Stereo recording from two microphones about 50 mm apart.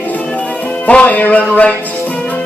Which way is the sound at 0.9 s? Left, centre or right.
Left.